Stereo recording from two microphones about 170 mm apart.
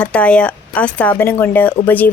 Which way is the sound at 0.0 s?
5° left (ahead or behind).